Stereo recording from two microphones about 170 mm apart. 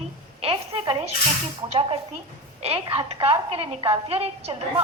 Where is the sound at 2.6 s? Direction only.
35° right (ahead or behind).